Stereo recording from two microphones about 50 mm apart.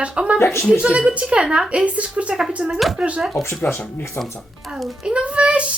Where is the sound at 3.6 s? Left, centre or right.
Left.